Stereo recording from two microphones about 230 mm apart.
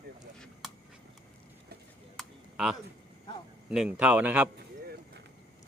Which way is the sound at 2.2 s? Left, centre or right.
Centre.